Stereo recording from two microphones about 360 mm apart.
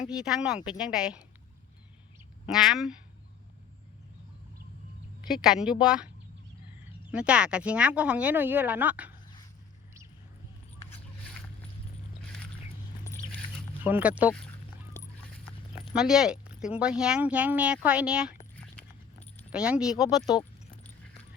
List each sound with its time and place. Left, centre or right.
0.0 s speech: centre
2.5 s speech: centre
5.3 s speech: centre
7.1 s speech: centre
13.8 s speech: centre
15.9 s speech: centre
19.4 s speech: centre